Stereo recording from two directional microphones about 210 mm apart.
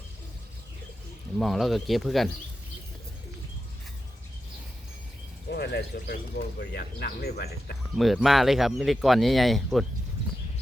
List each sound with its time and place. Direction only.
1.4 s speech: centre (ahead or behind)
5.5 s speech: 50° left (ahead or behind)
7.9 s speech: centre (ahead or behind)